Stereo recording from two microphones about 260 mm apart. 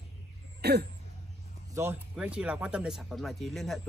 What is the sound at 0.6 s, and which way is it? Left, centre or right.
Throat clearing, right.